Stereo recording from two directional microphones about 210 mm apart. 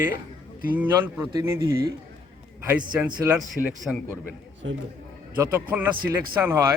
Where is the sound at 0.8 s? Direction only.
10° right (ahead or behind).